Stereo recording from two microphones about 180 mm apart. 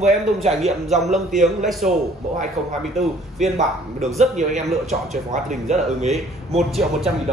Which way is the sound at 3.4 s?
Centre (ahead or behind).